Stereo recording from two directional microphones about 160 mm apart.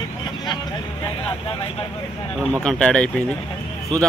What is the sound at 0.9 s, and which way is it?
Speech, 25° left (ahead or behind).